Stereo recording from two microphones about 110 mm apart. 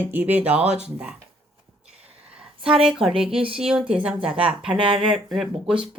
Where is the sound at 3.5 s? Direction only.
10° right (ahead or behind).